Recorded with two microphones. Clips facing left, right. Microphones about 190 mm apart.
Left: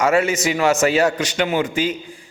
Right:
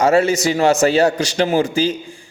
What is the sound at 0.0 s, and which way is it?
A man's voice, 30° right (ahead or behind).